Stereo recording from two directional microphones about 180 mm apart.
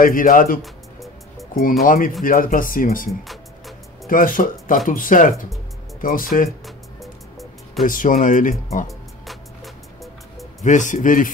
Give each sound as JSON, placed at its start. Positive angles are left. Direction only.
{"t": 0.0, "sound": "speech", "side_deg": 50}
{"t": 3.1, "sound": "music", "side_deg": 0}
{"t": 4.1, "sound": "speech", "side_deg": 50}
{"t": 6.6, "sound": "music", "side_deg": 0}
{"t": 7.8, "sound": "speech", "side_deg": 50}
{"t": 10.6, "sound": "speech", "side_deg": 45}